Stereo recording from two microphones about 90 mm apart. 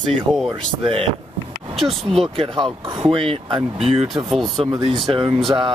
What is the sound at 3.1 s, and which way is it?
Speech, 85° right.